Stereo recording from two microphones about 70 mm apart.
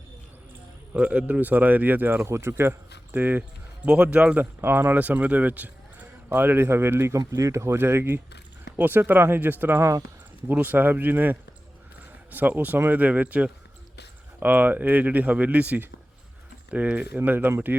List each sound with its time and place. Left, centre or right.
0.9 s speech: right
3.8 s speech: centre
4.4 s speech: right
7.3 s speech: right